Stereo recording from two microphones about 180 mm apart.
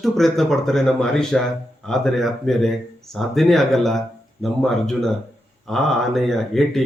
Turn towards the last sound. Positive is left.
turn(degrees=0)  # may be behind; listen again after turning